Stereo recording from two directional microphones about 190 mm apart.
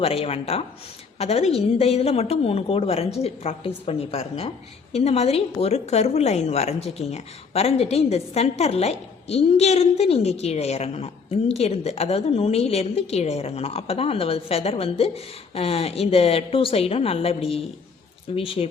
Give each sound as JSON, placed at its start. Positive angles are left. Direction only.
{"t": 0.0, "sound": "a woman's voice", "side_deg": 30}